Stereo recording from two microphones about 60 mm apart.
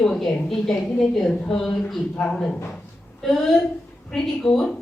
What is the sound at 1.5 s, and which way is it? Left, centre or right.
A woman's voice, centre.